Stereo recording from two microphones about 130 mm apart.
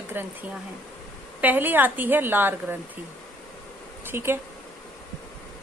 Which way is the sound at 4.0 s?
15° right (ahead or behind).